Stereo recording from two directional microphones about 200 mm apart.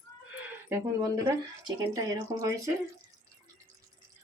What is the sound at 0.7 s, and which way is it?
Speech, 15° right (ahead or behind).